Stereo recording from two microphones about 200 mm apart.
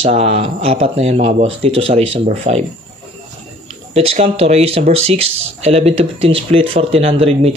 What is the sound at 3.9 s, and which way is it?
Speech, 30° right (ahead or behind).